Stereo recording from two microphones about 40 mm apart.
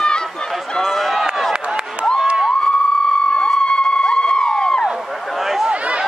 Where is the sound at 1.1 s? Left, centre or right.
Centre.